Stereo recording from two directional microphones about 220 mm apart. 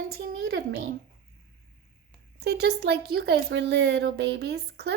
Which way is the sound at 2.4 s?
50° right (ahead or behind).